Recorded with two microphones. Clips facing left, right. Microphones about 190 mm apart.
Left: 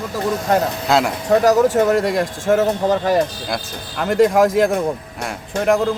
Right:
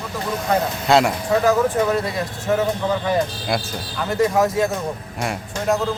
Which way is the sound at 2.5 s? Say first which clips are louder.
Left 4 dB; 45° left (ahead or behind).